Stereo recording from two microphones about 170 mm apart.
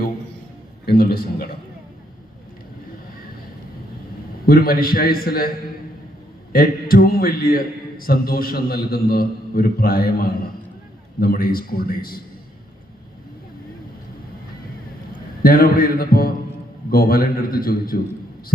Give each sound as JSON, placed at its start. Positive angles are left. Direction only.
{"t": 0.9, "sound": "a man's voice", "side_deg": 60}
{"t": 4.4, "sound": "a man's voice", "side_deg": 60}
{"t": 6.5, "sound": "a man's voice", "side_deg": 60}
{"t": 15.4, "sound": "a man's voice", "side_deg": 60}